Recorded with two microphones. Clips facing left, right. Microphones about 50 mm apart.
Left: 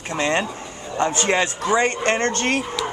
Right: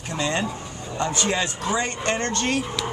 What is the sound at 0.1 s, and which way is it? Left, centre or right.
Speech, left.